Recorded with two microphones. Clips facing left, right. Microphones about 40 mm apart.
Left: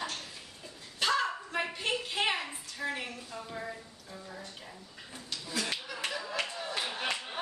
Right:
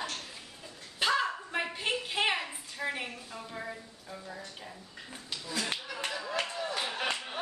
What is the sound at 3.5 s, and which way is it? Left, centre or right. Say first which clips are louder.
Music: right 1 dB; centre.